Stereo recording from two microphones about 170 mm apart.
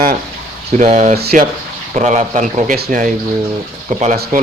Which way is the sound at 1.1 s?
70° right (ahead or behind).